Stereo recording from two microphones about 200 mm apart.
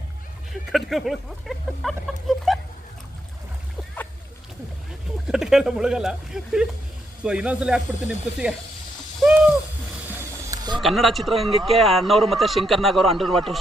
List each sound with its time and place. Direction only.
0.5 s speech: centre (ahead or behind)
5.3 s speech: 5° right (ahead or behind)
9.2 s owl: 5° right (ahead or behind)
10.8 s speech: centre (ahead or behind)